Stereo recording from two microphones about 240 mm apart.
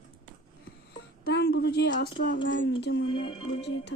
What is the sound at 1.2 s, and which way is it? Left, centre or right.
A woman's voice, left.